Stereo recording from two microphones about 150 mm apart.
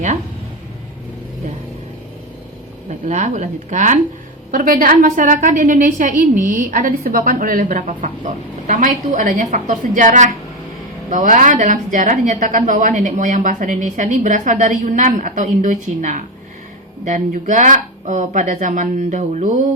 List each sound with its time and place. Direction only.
3.1 s speech: 55° right (ahead or behind)
4.5 s a woman's voice: 65° right (ahead or behind)